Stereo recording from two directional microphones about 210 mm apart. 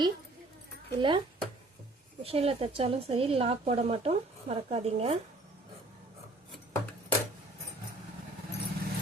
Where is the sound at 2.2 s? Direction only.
25° right (ahead or behind).